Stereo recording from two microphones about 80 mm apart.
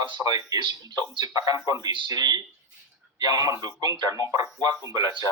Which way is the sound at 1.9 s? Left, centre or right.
Right.